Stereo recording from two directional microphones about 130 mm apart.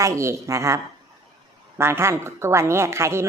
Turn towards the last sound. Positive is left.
turn(degrees=-20)  # may be behind; listen again after turning